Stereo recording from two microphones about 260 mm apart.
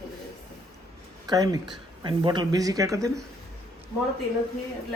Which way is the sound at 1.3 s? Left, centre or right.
Centre.